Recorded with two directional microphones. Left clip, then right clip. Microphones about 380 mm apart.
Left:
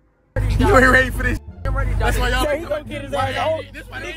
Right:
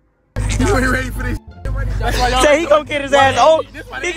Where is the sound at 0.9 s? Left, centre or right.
Centre.